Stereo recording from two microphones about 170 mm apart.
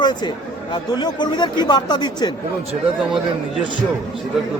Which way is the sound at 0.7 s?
25° left (ahead or behind).